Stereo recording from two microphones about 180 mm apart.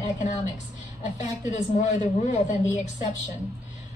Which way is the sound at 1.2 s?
40° left (ahead or behind).